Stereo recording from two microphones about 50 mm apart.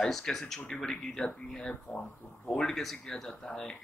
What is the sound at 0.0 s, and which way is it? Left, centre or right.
Speech, centre.